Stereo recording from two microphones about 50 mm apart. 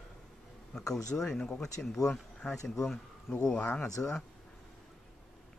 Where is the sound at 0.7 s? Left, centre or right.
Centre.